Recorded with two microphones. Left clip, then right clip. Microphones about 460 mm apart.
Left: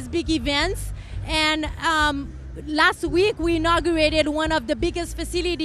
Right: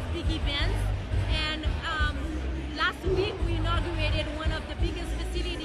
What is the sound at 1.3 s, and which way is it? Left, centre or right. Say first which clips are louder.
Music: left 11 dB; left.